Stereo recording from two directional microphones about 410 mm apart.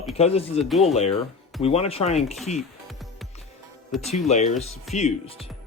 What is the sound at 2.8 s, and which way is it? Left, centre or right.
Music, centre.